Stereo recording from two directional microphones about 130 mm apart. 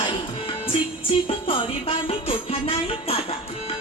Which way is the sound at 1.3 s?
45° left (ahead or behind).